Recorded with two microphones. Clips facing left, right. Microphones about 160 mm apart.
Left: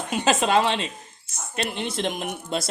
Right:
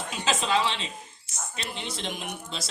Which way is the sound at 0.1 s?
55° left (ahead or behind).